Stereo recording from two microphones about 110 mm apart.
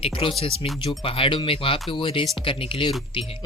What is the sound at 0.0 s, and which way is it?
Speech, 55° left (ahead or behind).